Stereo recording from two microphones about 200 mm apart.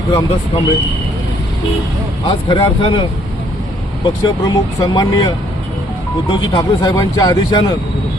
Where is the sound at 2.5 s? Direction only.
25° left (ahead or behind).